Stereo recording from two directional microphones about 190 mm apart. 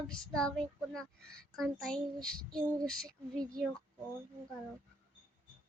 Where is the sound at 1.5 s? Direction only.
Centre (ahead or behind).